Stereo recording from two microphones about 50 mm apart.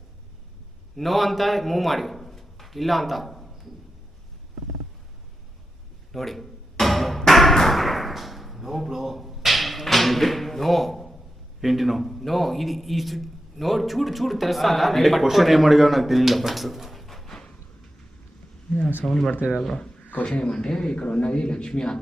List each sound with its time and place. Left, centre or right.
0.9 s a man's voice: centre
6.1 s a sound: centre
11.6 s a man's voice: centre
19.0 s speech: centre